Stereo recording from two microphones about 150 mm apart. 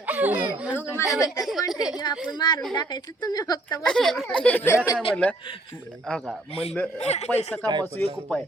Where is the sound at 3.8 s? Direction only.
5° left (ahead or behind).